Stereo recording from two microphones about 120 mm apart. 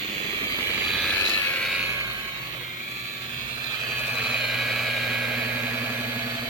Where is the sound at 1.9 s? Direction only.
30° right (ahead or behind).